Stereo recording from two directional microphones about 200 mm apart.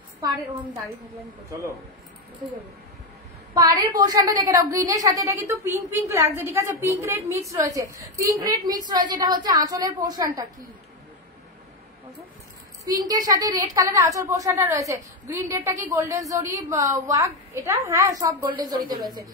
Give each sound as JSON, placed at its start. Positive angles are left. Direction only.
{"t": 4.0, "sound": "a woman's voice", "side_deg": -20}
{"t": 13.0, "sound": "a woman's voice", "side_deg": -20}